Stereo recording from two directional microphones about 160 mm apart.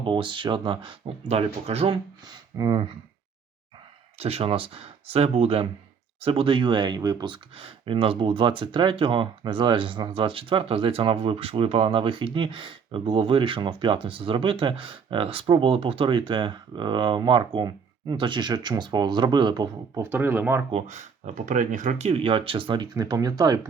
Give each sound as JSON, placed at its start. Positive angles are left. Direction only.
{"t": 0.0, "sound": "speech", "side_deg": -30}
{"t": 4.2, "sound": "speech", "side_deg": -40}
{"t": 20.1, "sound": "speech", "side_deg": -10}
{"t": 20.7, "sound": "speech", "side_deg": -45}